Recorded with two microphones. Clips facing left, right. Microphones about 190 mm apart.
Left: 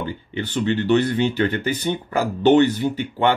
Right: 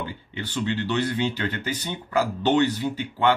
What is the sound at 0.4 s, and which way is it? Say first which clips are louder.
Speech: left 5 dB; 55° left (ahead or behind).